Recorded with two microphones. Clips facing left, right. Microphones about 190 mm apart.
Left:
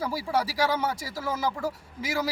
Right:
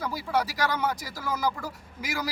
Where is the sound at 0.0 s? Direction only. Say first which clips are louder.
Left 1 dB; 30° left (ahead or behind).